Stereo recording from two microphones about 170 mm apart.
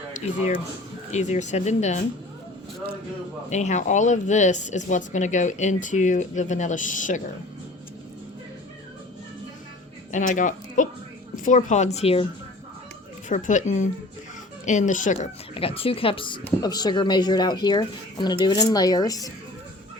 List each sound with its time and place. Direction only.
0.1 s speech: 40° left (ahead or behind)
3.5 s speech: 45° left (ahead or behind)
10.1 s speech: 45° left (ahead or behind)
13.2 s speech: 45° left (ahead or behind); by 19.3 s 20° left (ahead or behind)